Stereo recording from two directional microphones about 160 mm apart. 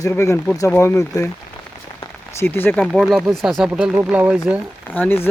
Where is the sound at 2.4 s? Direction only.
15° left (ahead or behind).